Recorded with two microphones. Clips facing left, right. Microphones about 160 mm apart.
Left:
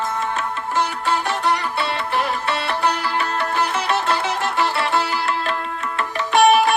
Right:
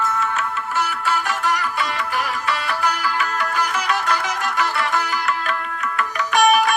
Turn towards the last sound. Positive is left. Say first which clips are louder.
# left 2 dB
turn(degrees=25)  # may be behind; listen again after turning